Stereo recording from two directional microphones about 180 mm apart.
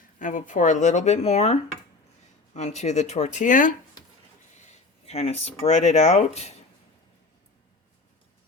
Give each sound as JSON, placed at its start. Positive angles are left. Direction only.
{"t": 0.2, "sound": "speech", "side_deg": 45}
{"t": 4.5, "sound": "speech", "side_deg": 35}